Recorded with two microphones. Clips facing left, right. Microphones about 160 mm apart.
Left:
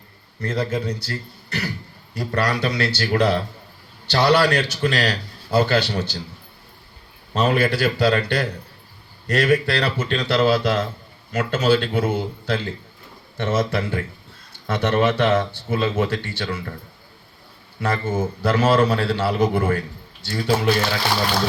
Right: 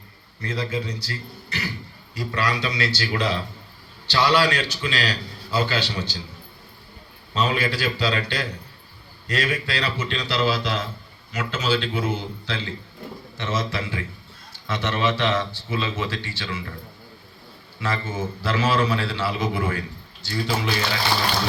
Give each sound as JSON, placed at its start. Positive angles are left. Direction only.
{"t": 0.4, "sound": "a man's voice", "side_deg": 45}
{"t": 7.3, "sound": "a man's voice", "side_deg": 55}
{"t": 17.7, "sound": "a man's voice", "side_deg": 50}